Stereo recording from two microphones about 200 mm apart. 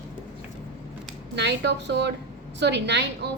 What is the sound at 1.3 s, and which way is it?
A woman's voice, 60° right (ahead or behind).